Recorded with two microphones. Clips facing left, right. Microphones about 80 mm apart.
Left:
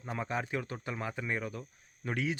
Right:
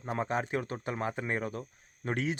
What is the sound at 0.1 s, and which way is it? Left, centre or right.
Speech, right.